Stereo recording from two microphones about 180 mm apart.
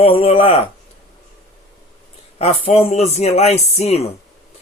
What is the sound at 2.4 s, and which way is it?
Speech, 35° left (ahead or behind).